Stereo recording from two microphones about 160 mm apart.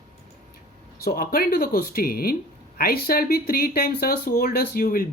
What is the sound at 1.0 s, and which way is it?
Speech, 70° left (ahead or behind).